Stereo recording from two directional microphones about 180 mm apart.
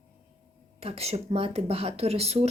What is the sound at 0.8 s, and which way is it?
Speech, 35° right (ahead or behind).